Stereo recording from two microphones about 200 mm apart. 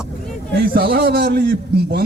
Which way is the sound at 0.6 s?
50° right (ahead or behind).